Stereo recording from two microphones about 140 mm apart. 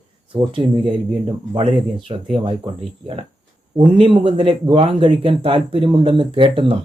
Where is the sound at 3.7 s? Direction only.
35° right (ahead or behind).